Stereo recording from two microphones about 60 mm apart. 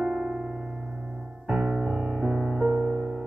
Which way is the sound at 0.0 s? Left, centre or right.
Centre.